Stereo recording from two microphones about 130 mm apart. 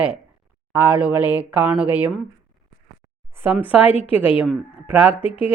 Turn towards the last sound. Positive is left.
turn(degrees=40)  # may be behind; listen again after turning